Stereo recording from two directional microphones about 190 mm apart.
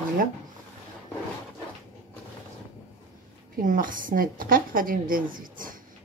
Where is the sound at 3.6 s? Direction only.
45° right (ahead or behind).